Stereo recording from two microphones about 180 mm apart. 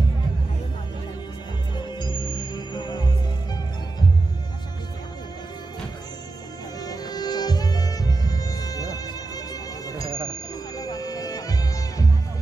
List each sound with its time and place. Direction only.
1.8 s music: 25° left (ahead or behind)
6.8 s music: 20° left (ahead or behind)